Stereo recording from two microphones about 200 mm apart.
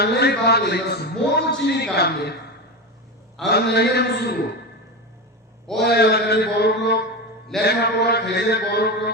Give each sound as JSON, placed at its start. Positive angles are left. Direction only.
{"t": 0.0, "sound": "a man's voice", "side_deg": 55}
{"t": 3.5, "sound": "a man's voice", "side_deg": 55}
{"t": 5.8, "sound": "a man's voice", "side_deg": 55}